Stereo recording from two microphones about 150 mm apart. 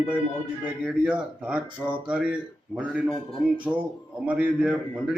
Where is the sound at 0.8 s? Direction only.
5° right (ahead or behind).